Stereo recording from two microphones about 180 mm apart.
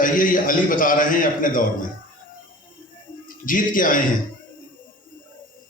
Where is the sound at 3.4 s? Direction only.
50° left (ahead or behind).